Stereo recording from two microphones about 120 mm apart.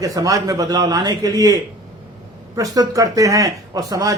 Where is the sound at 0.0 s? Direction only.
30° right (ahead or behind).